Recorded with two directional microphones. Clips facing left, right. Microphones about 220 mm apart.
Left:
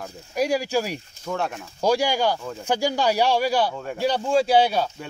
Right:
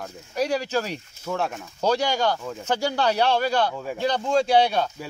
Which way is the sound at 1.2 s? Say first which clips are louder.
Even; centre (ahead or behind).